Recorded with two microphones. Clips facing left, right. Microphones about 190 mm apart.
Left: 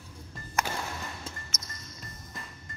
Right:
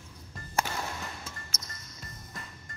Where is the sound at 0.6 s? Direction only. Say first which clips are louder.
Left 1 dB; 45° left (ahead or behind).